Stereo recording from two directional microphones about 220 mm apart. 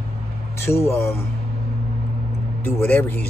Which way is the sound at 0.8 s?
10° left (ahead or behind).